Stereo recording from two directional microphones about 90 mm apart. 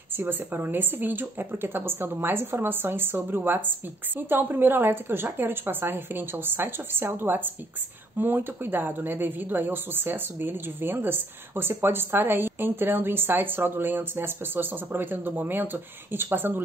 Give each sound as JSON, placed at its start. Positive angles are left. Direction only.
{"t": 0.2, "sound": "speech", "side_deg": -20}